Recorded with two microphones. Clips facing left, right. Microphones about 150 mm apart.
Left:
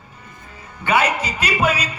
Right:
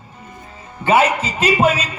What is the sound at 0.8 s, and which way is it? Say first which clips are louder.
Speech: right 4 dB; 30° right (ahead or behind).